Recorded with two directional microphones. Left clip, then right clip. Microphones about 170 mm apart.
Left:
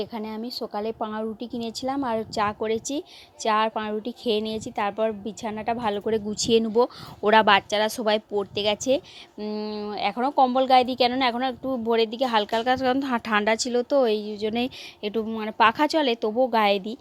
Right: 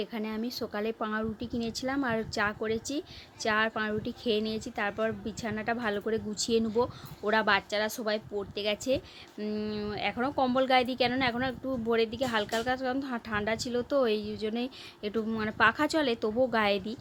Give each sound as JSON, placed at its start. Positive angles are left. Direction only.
{"t": 0.0, "sound": "a woman's voice", "side_deg": 25}
{"t": 9.4, "sound": "a woman's voice", "side_deg": 20}
{"t": 14.5, "sound": "a woman's voice", "side_deg": 40}
{"t": 15.1, "sound": "a woman's voice", "side_deg": 25}